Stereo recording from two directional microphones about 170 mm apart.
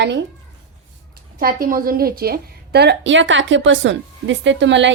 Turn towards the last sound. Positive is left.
turn(degrees=-90)